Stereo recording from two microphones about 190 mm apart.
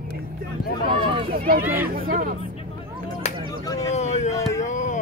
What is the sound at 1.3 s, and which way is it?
Speech, 50° right (ahead or behind).